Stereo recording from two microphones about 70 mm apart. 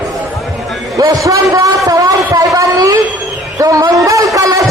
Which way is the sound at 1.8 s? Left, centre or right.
Right.